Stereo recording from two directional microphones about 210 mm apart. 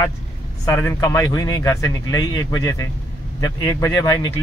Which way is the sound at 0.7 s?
15° left (ahead or behind).